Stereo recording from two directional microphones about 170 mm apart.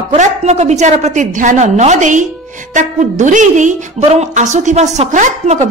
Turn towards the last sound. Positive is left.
turn(degrees=-45)  # may be behind; listen again after turning